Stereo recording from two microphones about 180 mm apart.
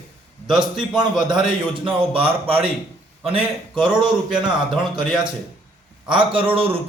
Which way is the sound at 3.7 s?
5° right (ahead or behind).